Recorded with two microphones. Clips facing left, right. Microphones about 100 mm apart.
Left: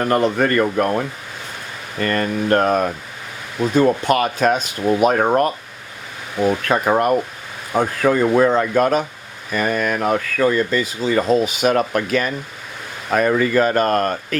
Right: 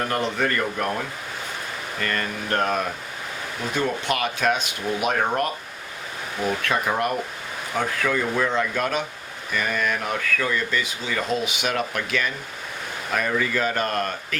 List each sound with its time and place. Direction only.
0.1 s speech: 45° left (ahead or behind)
2.0 s speech: 40° left (ahead or behind)
3.8 s speech: 40° left (ahead or behind)
6.7 s speech: 45° left (ahead or behind)